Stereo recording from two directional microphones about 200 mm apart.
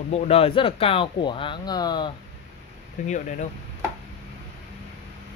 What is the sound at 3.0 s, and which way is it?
Speech, 35° left (ahead or behind).